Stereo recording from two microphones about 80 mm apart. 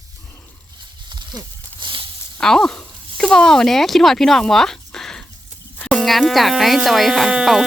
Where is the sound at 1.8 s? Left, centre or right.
Right.